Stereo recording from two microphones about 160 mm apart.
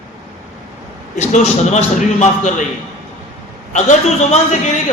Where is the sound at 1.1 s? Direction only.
45° left (ahead or behind).